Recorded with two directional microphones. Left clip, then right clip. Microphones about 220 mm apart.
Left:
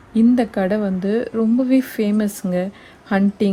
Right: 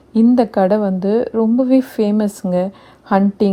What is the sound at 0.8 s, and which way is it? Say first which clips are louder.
A woman's voice: right 5 dB; centre (ahead or behind).